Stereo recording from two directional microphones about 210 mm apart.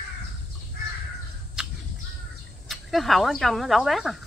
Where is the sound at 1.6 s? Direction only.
Centre (ahead or behind).